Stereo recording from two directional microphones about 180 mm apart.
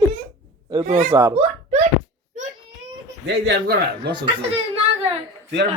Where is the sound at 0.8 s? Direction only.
40° right (ahead or behind).